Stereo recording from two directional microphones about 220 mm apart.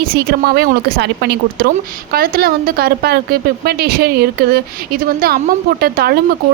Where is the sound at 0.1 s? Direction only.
45° right (ahead or behind).